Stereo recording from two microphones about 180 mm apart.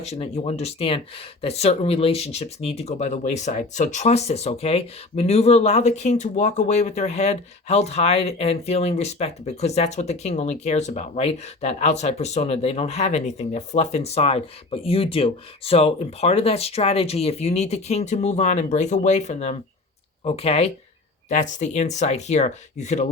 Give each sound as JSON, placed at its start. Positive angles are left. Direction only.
{"t": 0.0, "sound": "speech", "side_deg": 35}